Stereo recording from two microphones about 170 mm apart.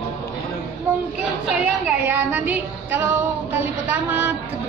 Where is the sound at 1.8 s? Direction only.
10° right (ahead or behind).